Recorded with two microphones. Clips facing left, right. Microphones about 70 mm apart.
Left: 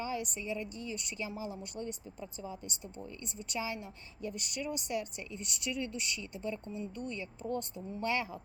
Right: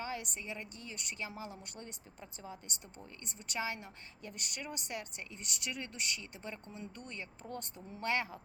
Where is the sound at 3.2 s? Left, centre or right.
Right.